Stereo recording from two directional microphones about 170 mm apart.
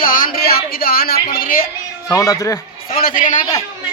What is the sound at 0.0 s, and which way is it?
Music, 55° left (ahead or behind).